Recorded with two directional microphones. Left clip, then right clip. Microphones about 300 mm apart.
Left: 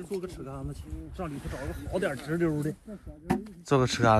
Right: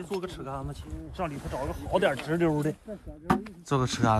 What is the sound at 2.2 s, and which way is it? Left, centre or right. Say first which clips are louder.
Speech: right 2 dB; centre.